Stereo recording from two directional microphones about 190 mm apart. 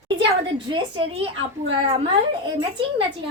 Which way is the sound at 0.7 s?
30° right (ahead or behind).